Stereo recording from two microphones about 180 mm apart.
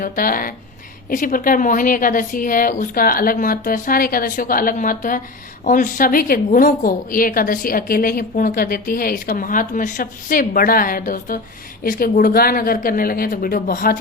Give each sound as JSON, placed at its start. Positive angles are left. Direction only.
{"t": 0.0, "sound": "a woman's voice", "side_deg": 50}